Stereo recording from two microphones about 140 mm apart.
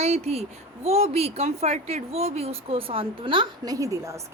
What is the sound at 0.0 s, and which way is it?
A child's voice, 50° right (ahead or behind).